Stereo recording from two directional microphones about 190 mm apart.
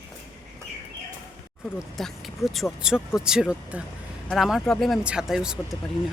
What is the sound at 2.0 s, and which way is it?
Speech, centre (ahead or behind).